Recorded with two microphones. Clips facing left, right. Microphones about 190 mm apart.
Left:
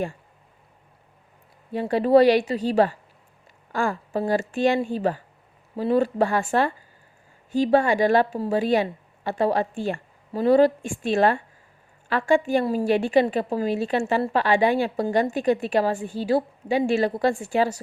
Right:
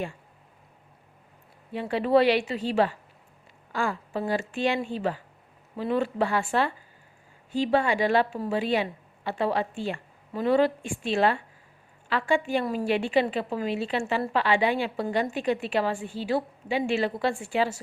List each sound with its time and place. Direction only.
1.7 s a woman's voice: 40° left (ahead or behind)